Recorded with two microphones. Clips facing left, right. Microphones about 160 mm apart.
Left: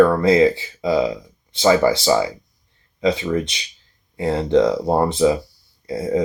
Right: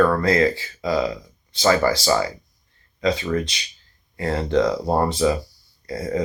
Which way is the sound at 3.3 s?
20° left (ahead or behind).